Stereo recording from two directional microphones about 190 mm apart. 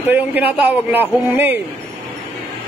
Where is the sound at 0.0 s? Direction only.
10° right (ahead or behind).